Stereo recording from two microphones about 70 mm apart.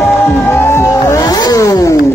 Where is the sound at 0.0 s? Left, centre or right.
Left.